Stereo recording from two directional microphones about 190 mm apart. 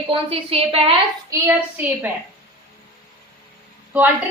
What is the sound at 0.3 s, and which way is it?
Speech, 30° right (ahead or behind).